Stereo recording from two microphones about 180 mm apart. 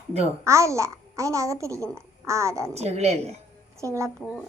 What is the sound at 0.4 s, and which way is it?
A child's voice, 15° right (ahead or behind).